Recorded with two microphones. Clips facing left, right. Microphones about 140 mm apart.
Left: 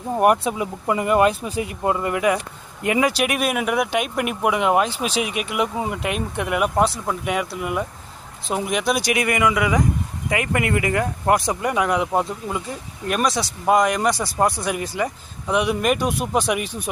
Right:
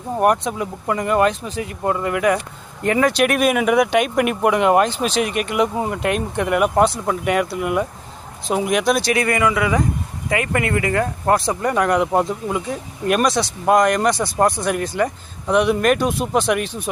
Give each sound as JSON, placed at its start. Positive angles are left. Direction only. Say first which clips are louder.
{"t": 0.2, "sound": "speech", "louder": "even", "side_deg": 5}
{"t": 9.0, "sound": "speech", "louder": "right 2 dB", "side_deg": 15}
{"t": 13.3, "sound": "speech", "louder": "right 2 dB", "side_deg": 5}